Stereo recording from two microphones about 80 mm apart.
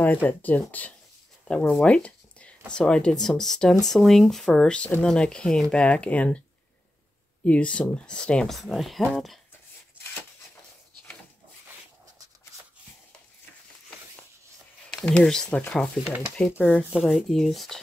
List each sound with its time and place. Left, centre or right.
0.0 s speech: left
7.4 s speech: centre
14.9 s speech: centre
16.4 s speech: centre